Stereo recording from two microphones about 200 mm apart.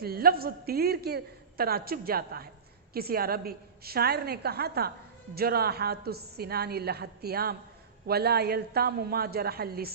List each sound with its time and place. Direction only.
0.0 s a woman's voice: 50° right (ahead or behind)